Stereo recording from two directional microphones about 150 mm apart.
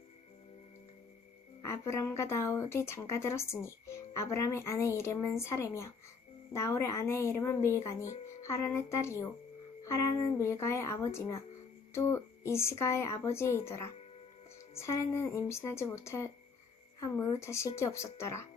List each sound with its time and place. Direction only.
1.6 s speech: 20° left (ahead or behind)